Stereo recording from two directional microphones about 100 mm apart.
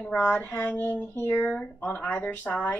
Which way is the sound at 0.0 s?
10° left (ahead or behind).